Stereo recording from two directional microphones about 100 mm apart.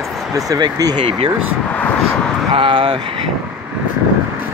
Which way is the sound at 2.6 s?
60° right (ahead or behind).